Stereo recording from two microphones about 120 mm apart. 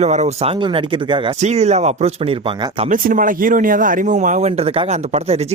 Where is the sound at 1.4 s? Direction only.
65° right (ahead or behind).